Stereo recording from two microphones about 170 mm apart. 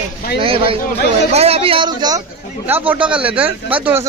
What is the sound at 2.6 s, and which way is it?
A man's voice, 10° right (ahead or behind).